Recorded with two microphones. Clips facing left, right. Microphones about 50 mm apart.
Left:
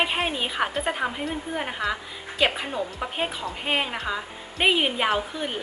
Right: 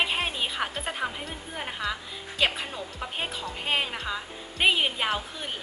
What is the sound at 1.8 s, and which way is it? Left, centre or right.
Speech, centre.